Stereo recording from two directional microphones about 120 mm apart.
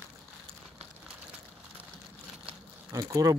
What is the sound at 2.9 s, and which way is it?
Speech, 30° right (ahead or behind).